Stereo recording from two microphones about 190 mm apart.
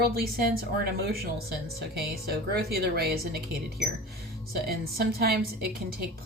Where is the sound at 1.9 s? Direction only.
55° right (ahead or behind).